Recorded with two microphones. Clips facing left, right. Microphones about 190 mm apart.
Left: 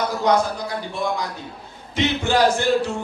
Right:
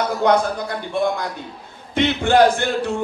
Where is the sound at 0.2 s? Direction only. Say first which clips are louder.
Right 2 dB; 55° right (ahead or behind).